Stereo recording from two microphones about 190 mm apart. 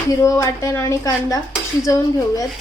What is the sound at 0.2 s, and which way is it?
A woman's voice, 15° left (ahead or behind).